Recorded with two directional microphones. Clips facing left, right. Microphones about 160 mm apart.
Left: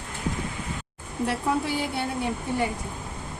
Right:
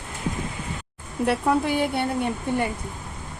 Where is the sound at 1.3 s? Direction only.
60° right (ahead or behind).